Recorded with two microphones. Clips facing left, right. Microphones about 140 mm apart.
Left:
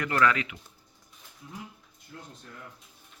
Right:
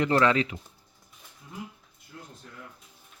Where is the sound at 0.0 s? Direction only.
25° right (ahead or behind).